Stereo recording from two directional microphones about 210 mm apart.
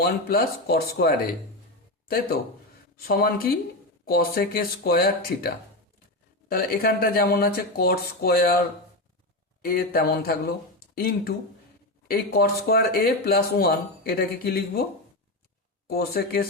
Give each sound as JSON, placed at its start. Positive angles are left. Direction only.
{"t": 0.0, "sound": "speech", "side_deg": 45}
{"t": 3.0, "sound": "speech", "side_deg": 45}
{"t": 9.6, "sound": "speech", "side_deg": 45}
{"t": 15.9, "sound": "speech", "side_deg": 50}